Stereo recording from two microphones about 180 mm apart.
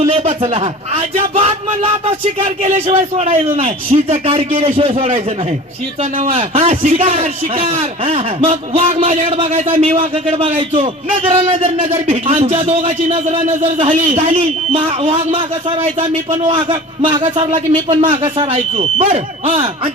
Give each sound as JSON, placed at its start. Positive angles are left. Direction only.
{"t": 0.1, "sound": "a man's voice", "side_deg": -30}
{"t": 6.0, "sound": "a man's voice", "side_deg": -45}
{"t": 6.3, "sound": "a man's voice", "side_deg": -30}
{"t": 9.5, "sound": "a man's voice", "side_deg": -45}
{"t": 10.2, "sound": "a man's voice", "side_deg": -30}
{"t": 13.4, "sound": "a man's voice", "side_deg": -45}